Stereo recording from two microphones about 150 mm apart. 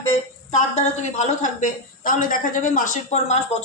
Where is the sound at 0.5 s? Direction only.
50° left (ahead or behind).